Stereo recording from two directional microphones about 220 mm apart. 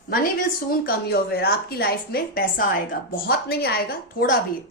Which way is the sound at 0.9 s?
45° left (ahead or behind).